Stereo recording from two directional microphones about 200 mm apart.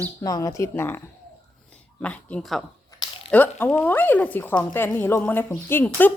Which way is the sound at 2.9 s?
15° left (ahead or behind).